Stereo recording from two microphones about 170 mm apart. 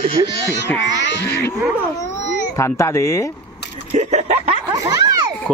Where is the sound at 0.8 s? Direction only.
90° left.